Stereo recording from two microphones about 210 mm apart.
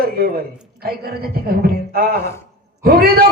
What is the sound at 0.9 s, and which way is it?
A woman's voice, 45° right (ahead or behind).